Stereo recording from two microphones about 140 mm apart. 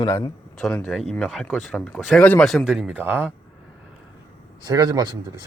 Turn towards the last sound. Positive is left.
turn(degrees=-30)  # may be behind; listen again after turning